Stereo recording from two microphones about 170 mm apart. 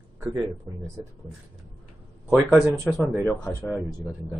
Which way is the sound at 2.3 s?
Centre (ahead or behind).